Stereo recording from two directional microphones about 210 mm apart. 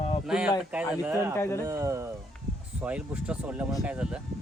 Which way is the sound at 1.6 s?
15° right (ahead or behind).